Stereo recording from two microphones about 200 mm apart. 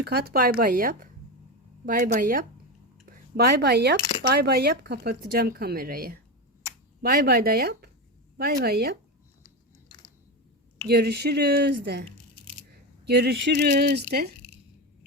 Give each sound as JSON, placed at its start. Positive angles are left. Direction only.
{"t": 0.0, "sound": "speech", "side_deg": -50}
{"t": 10.8, "sound": "speech", "side_deg": -55}
{"t": 13.1, "sound": "speech", "side_deg": -55}